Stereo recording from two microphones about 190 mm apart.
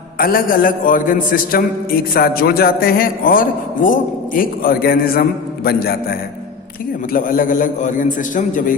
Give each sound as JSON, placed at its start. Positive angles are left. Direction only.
{"t": 0.2, "sound": "a man's voice", "side_deg": 50}